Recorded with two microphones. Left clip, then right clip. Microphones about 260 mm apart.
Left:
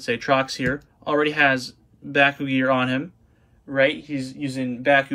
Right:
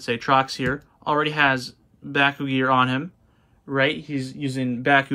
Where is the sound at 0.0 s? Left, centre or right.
Centre.